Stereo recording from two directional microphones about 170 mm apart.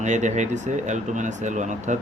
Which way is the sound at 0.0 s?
45° right (ahead or behind).